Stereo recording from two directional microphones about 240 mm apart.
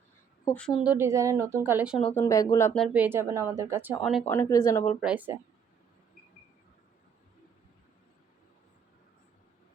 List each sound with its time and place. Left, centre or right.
0.4 s speech: centre
2.1 s speech: centre
4.4 s speech: centre
4.9 s speech: centre